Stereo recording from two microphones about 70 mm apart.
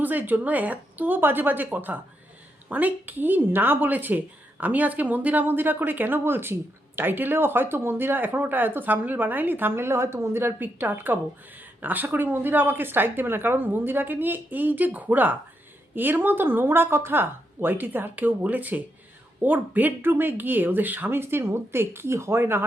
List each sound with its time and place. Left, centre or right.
0.0 s a woman's voice: right